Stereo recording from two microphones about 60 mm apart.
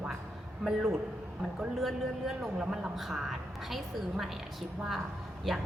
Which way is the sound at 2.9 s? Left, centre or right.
Centre.